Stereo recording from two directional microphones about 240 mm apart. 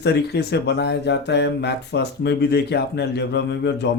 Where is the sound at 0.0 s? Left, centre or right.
Left.